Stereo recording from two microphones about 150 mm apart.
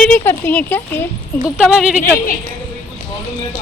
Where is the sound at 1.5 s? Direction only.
5° right (ahead or behind).